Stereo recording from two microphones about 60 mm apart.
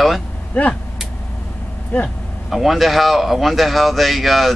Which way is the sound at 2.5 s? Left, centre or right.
Centre.